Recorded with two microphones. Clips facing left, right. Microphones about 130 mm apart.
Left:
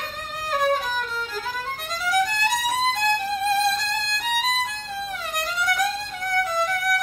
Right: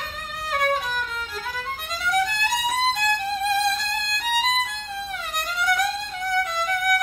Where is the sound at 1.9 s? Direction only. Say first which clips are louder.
Left 1 dB; centre (ahead or behind).